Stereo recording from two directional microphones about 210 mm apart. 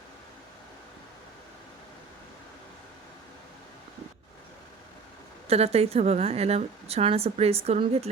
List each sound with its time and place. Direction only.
5.5 s a woman's voice: 30° right (ahead or behind)